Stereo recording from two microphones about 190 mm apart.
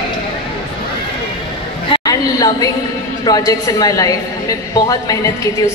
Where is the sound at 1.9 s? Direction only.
20° left (ahead or behind).